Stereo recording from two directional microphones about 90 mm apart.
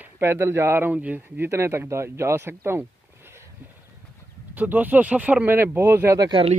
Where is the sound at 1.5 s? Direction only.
30° right (ahead or behind).